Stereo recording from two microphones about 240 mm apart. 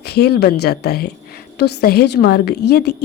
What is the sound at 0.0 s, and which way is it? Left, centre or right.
A woman's voice, left.